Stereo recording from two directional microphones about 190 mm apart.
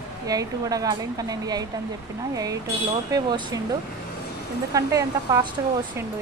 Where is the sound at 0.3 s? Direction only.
20° right (ahead or behind).